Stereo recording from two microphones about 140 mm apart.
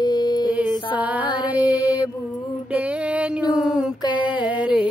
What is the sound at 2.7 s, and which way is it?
Music, 10° right (ahead or behind).